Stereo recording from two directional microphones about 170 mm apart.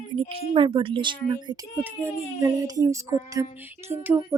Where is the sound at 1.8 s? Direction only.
15° right (ahead or behind).